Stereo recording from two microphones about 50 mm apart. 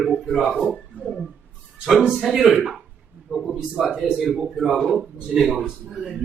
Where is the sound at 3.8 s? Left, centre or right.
Centre.